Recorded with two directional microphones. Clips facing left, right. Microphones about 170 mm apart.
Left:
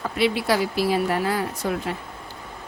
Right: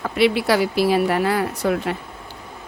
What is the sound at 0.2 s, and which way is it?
Speech, 70° right (ahead or behind).